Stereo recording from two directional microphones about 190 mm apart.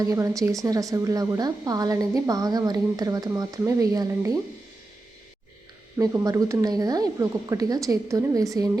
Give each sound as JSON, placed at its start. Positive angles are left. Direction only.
{"t": 0.0, "sound": "speech", "side_deg": -15}
{"t": 6.0, "sound": "a woman's voice", "side_deg": -15}